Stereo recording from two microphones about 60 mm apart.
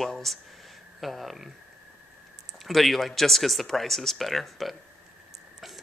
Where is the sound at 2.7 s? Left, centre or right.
Centre.